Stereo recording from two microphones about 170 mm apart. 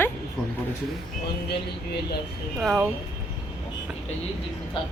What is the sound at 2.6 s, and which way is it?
Speech, centre (ahead or behind).